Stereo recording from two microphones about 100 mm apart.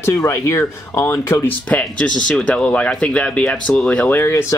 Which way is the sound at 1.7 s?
15° left (ahead or behind).